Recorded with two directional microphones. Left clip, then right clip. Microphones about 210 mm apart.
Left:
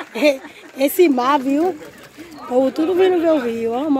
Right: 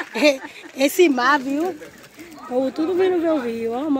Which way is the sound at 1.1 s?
15° left (ahead or behind).